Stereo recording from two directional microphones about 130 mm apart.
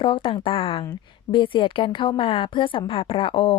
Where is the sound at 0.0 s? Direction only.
40° left (ahead or behind).